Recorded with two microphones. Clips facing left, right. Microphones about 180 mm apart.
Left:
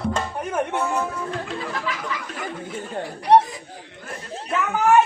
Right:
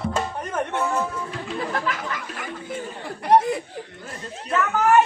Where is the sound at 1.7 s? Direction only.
50° right (ahead or behind).